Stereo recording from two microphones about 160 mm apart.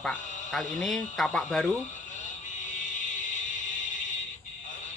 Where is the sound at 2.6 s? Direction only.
50° left (ahead or behind).